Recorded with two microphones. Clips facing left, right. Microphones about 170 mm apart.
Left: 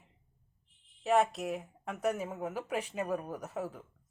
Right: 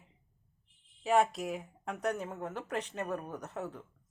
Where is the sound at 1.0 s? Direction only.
Centre (ahead or behind).